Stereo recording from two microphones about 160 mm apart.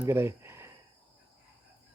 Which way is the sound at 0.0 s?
15° right (ahead or behind).